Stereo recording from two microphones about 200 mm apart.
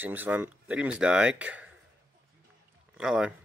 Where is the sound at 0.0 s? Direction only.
10° right (ahead or behind).